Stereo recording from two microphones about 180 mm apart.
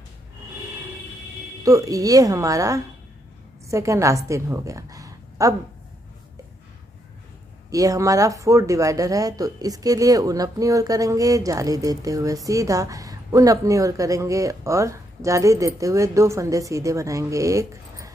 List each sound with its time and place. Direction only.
1.6 s a woman's voice: 20° right (ahead or behind)
7.7 s a woman's voice: 20° right (ahead or behind)